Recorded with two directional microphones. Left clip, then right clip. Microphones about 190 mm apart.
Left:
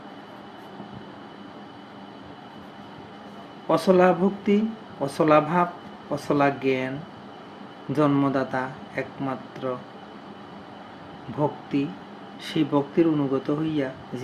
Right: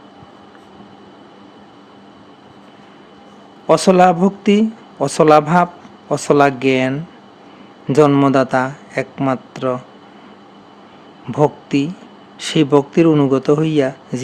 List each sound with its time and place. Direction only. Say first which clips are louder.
3.7 s speech: right 8 dB; 65° right (ahead or behind)
7.9 s speech: right 11 dB; 65° right (ahead or behind)
11.3 s speech: right 10 dB; 70° right (ahead or behind)